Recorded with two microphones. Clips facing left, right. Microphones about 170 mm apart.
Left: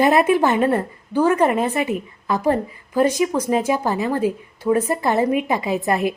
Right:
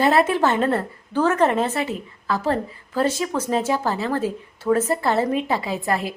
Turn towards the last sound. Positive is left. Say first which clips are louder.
# left 4 dB
turn(degrees=20)  # may be behind; listen again after turning